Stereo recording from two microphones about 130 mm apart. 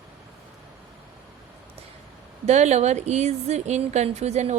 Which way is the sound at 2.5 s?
60° right (ahead or behind).